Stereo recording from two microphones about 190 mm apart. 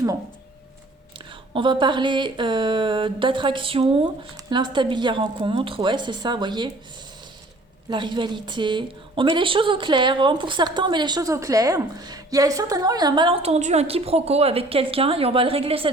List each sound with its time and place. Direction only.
1.5 s a woman's voice: 25° right (ahead or behind)
7.9 s a woman's voice: 25° right (ahead or behind)